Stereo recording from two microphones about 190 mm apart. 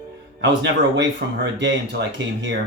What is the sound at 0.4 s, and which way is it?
Speech, 70° right (ahead or behind).